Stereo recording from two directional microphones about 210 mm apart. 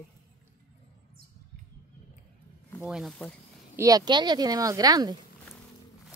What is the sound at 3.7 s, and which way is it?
Speech, 15° right (ahead or behind).